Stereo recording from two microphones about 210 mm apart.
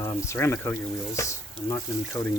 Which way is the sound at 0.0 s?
15° left (ahead or behind).